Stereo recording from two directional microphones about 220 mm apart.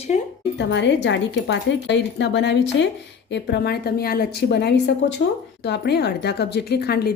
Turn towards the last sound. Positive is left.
turn(degrees=45)  # may be behind; listen again after turning